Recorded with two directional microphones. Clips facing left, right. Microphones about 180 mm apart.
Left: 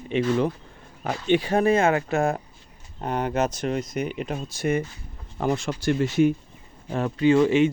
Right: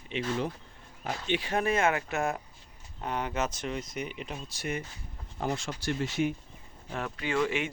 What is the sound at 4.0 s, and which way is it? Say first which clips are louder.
Speech: left 9 dB; 50° left (ahead or behind).